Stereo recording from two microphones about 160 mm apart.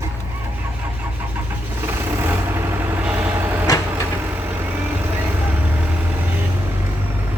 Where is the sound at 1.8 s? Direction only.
15° right (ahead or behind).